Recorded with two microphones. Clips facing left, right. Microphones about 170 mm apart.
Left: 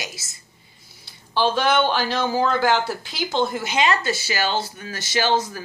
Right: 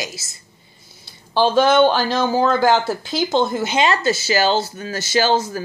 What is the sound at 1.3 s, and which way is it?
Speech, 35° right (ahead or behind).